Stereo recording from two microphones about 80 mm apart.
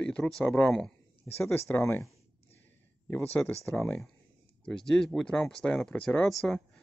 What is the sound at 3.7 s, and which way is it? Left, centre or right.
Speech, centre.